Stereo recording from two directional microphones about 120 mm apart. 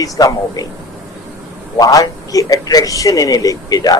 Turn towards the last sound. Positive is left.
turn(degrees=30)  # may be behind; listen again after turning